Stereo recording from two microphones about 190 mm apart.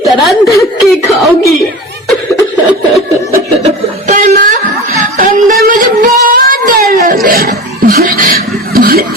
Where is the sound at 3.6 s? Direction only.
40° right (ahead or behind).